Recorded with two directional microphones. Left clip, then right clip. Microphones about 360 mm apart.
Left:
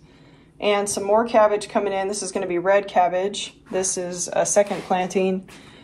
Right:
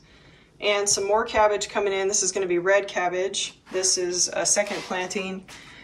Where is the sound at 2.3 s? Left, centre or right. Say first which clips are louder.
Left 4 dB; centre.